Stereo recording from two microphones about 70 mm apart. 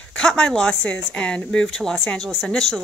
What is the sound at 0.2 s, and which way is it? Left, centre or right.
Speech, centre.